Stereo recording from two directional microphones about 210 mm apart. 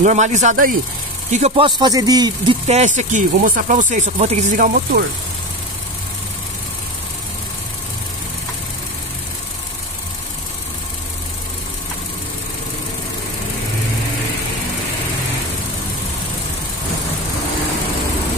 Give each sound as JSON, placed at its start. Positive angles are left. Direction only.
{"t": 0.0, "sound": "speech", "side_deg": -35}
{"t": 1.8, "sound": "speech", "side_deg": -20}
{"t": 2.7, "sound": "speech", "side_deg": -35}